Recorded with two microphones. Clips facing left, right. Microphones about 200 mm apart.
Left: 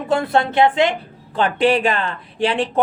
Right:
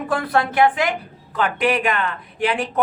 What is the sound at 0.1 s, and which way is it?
A woman's voice, 25° left (ahead or behind).